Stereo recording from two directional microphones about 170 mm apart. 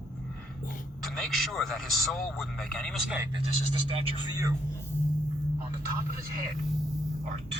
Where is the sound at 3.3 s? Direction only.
30° right (ahead or behind).